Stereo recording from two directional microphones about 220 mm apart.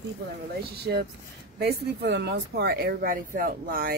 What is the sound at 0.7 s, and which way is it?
Speech, 45° right (ahead or behind).